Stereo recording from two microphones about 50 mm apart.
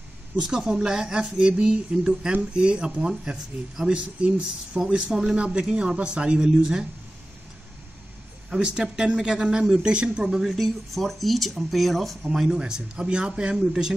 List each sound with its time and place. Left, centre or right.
0.4 s speech: centre
8.5 s speech: centre
10.4 s speech: centre
12.4 s speech: centre